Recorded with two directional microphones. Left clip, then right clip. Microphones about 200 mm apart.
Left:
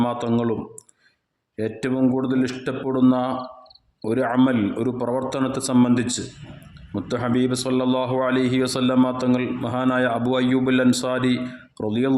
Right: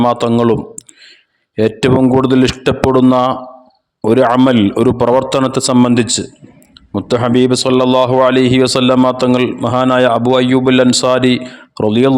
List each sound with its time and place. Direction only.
0.0 s a man's voice: 45° right (ahead or behind)
1.5 s a man's voice: 45° right (ahead or behind)